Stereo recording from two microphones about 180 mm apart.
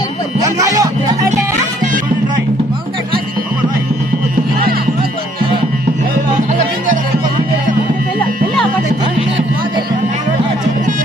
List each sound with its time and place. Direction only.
0.4 s music: 20° right (ahead or behind)
6.3 s music: 45° right (ahead or behind)